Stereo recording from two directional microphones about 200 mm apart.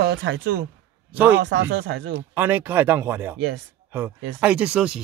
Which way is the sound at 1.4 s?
60° right (ahead or behind).